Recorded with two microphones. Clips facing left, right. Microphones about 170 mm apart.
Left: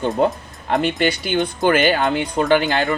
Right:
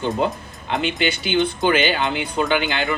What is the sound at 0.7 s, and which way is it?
Speech, 45° left (ahead or behind).